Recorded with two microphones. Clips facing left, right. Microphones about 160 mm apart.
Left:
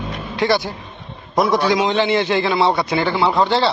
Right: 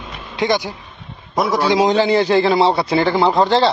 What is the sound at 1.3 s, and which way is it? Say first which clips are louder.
Speech: left 2 dB; centre (ahead or behind).